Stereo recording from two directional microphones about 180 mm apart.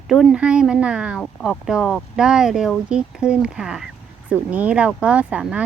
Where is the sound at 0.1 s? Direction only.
Centre (ahead or behind).